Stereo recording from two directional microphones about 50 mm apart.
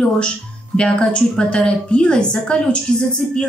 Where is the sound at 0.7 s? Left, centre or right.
Centre.